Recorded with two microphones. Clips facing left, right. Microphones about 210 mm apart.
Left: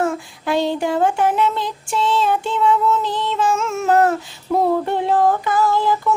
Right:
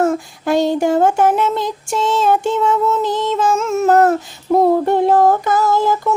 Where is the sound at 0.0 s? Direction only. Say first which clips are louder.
Right 5 dB; 45° right (ahead or behind).